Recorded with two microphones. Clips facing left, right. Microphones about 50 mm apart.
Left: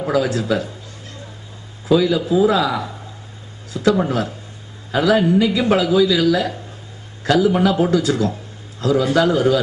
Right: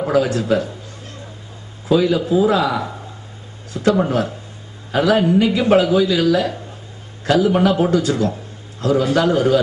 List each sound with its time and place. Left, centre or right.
0.0 s speech: right
1.9 s a woman's voice: right